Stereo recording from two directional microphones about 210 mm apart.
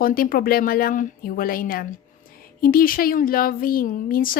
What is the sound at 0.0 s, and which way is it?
Speech, 45° left (ahead or behind).